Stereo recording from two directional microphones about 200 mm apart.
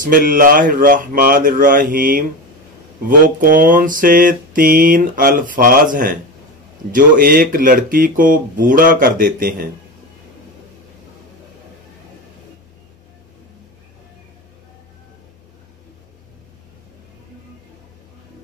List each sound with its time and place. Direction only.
0.0 s mantra: 45° right (ahead or behind)